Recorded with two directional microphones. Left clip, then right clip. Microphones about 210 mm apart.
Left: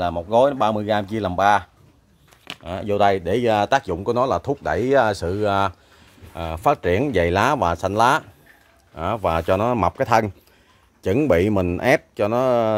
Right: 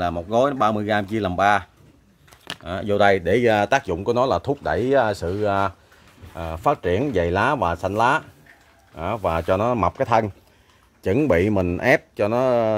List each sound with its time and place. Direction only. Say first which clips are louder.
0.0 s speech: left 3 dB; centre (ahead or behind)